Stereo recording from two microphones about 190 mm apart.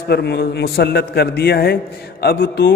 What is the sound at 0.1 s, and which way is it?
A man's voice, 60° left (ahead or behind).